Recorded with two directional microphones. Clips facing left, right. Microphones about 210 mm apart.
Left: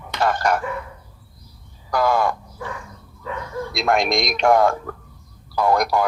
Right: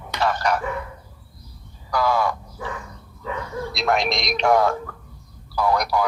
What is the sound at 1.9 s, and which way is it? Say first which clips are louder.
Crow: left 2 dB; 50° left (ahead or behind).